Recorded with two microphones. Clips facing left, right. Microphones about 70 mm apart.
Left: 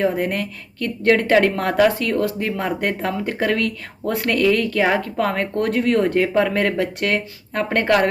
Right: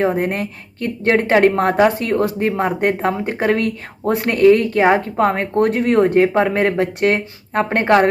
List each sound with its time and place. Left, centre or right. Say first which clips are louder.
0.0 s speech: right 2 dB; right